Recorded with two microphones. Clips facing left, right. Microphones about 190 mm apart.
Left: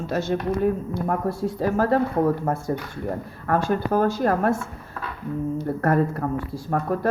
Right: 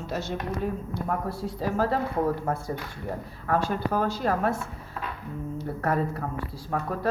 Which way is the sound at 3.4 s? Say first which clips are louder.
Left 4 dB; 50° left (ahead or behind).